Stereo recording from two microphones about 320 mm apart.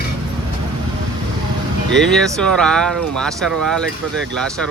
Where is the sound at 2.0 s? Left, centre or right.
Centre.